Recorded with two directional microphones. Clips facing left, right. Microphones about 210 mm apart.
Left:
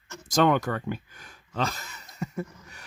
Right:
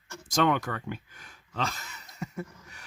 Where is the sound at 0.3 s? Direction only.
40° left (ahead or behind).